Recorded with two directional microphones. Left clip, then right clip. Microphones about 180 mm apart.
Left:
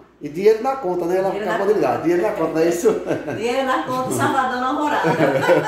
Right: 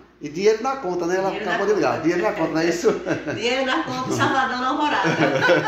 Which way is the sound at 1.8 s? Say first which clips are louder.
Left 2 dB; 15° right (ahead or behind).